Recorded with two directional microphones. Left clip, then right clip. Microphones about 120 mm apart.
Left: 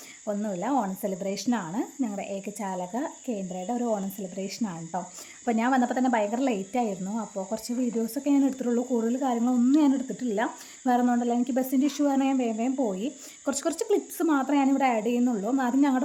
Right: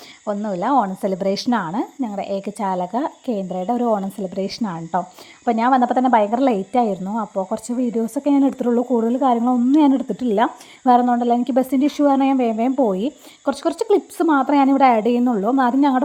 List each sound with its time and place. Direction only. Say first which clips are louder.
0.3 s speech: right 9 dB; 25° right (ahead or behind)
1.1 s speech: right 12 dB; 40° right (ahead or behind)
7.1 s speech: right 9 dB; 25° right (ahead or behind); by 13.1 s 40° right (ahead or behind)
13.4 s speech: right 8 dB; 20° right (ahead or behind); by 15.2 s 40° right (ahead or behind)
15.2 s speech: right 8 dB; 25° right (ahead or behind)
15.4 s speech: right 9 dB; 35° right (ahead or behind)